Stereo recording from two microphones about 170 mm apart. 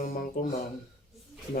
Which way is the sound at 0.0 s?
60° left (ahead or behind).